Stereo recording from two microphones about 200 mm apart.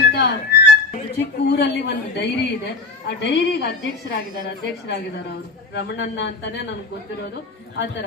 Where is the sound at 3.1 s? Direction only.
60° left (ahead or behind).